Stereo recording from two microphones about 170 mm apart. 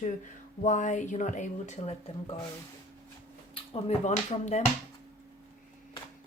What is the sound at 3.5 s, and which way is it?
Speech, 40° left (ahead or behind).